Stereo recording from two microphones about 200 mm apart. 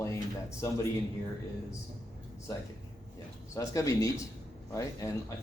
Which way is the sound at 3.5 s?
15° left (ahead or behind).